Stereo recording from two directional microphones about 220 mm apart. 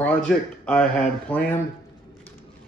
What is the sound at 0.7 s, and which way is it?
Speech, 5° left (ahead or behind).